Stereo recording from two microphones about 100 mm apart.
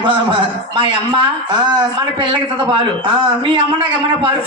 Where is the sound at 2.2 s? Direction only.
55° right (ahead or behind).